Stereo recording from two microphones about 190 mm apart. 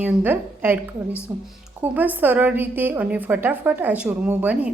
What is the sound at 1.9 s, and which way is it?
A woman's voice, 10° right (ahead or behind).